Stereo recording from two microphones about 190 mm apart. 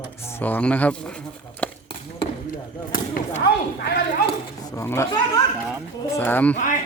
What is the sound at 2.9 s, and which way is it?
Chop, 50° left (ahead or behind).